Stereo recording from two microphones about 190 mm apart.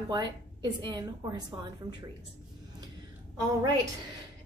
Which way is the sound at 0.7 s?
25° right (ahead or behind).